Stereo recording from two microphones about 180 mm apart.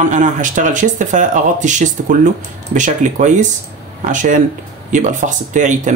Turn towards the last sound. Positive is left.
turn(degrees=-45)  # may be behind; listen again after turning